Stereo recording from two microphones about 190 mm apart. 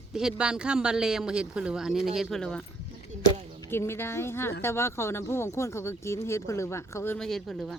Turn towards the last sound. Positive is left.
turn(degrees=0)  # may be behind; listen again after turning